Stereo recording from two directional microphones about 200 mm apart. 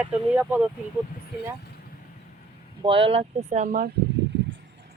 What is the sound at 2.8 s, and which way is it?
Speech, 25° right (ahead or behind).